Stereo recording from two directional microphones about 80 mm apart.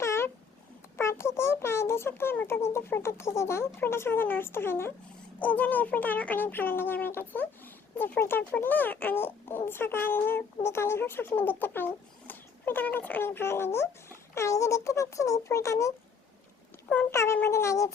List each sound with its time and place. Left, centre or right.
0.0 s a sound: left
0.9 s a child's voice: left
17.1 s speech: left